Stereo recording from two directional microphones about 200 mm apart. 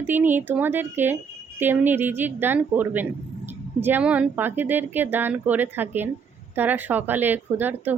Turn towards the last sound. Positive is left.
turn(degrees=-10)  # may be behind; listen again after turning